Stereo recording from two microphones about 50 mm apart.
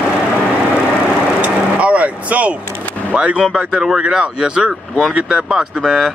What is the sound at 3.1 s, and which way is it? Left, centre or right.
Speech, centre.